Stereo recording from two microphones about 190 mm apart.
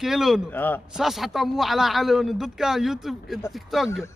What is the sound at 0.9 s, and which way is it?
A man's voice, centre (ahead or behind).